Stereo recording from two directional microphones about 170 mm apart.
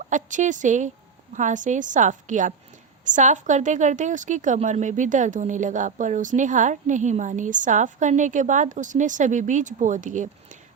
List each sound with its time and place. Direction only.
0.0 s a woman's voice: 45° right (ahead or behind)